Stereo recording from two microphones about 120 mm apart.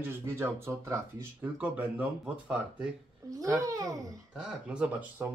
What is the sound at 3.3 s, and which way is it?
Speech, 30° right (ahead or behind).